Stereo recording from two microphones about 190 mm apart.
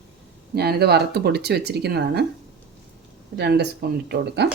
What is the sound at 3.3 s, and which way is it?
Speech, 60° right (ahead or behind).